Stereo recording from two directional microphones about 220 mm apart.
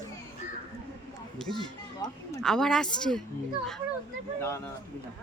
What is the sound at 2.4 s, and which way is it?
Speech, centre (ahead or behind).